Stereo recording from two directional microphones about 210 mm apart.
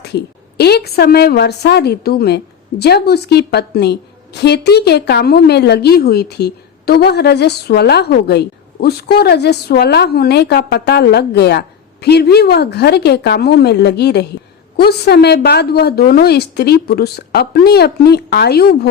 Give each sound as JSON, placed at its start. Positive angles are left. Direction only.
{"t": 0.0, "sound": "a woman's voice", "side_deg": 50}